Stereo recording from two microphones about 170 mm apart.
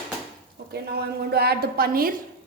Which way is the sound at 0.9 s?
70° right (ahead or behind).